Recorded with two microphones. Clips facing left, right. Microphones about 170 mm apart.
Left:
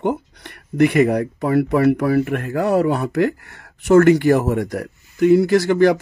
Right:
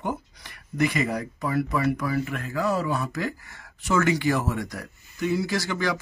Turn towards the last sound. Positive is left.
turn(degrees=55)  # may be behind; listen again after turning